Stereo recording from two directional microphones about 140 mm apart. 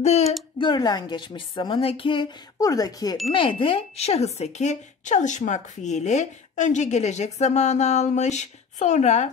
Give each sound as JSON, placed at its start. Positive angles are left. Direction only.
{"t": 0.0, "sound": "speech", "side_deg": 50}
{"t": 0.6, "sound": "a woman's voice", "side_deg": 30}
{"t": 2.6, "sound": "speech", "side_deg": 25}
{"t": 3.3, "sound": "speech", "side_deg": 40}